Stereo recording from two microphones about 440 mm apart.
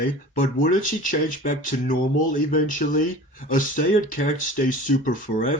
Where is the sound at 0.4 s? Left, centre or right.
Centre.